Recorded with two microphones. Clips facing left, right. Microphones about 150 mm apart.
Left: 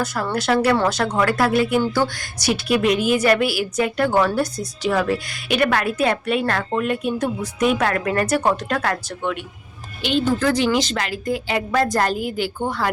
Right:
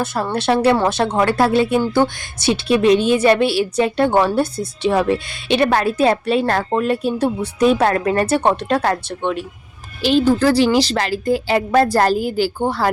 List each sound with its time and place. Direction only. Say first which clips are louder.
0.0 s a woman's voice: right 3 dB; 25° right (ahead or behind)